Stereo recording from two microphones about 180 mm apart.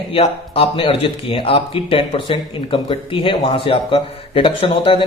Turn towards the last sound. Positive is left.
turn(degrees=30)  # may be behind; listen again after turning